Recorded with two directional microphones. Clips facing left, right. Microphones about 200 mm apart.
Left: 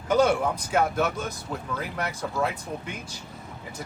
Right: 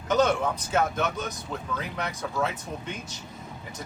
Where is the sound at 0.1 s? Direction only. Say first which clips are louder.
Left 2 dB; 10° left (ahead or behind).